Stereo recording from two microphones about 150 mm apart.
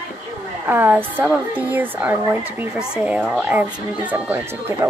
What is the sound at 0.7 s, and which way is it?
Speech, 15° right (ahead or behind).